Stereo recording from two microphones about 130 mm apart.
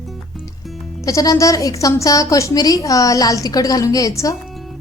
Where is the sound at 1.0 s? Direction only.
25° left (ahead or behind).